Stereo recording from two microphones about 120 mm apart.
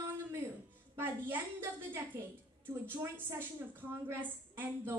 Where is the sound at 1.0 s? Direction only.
20° right (ahead or behind).